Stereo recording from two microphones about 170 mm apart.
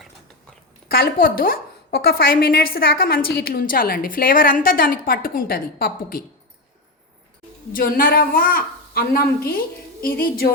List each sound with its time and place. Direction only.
0.9 s a woman's voice: 60° left (ahead or behind)
7.7 s a woman's voice: 55° left (ahead or behind)